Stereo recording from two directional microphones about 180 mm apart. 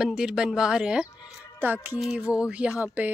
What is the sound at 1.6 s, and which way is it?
Music, 10° right (ahead or behind).